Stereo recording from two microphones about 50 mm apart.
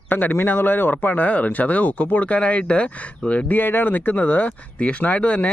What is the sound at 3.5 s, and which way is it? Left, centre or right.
Speech, left.